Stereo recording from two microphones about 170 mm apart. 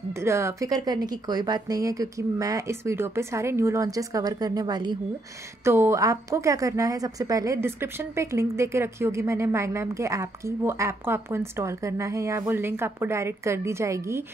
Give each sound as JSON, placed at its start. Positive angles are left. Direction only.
{"t": 0.2, "sound": "a woman's voice", "side_deg": -15}